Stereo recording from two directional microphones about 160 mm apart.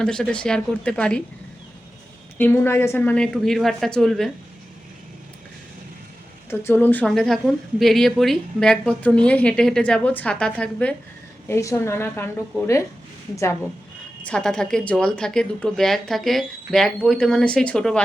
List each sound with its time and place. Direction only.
0.0 s speech: 5° left (ahead or behind)
2.4 s a woman's voice: 15° left (ahead or behind)
6.5 s speech: 15° left (ahead or behind)
11.4 s speech: 15° left (ahead or behind)
14.3 s a woman's voice: 5° left (ahead or behind)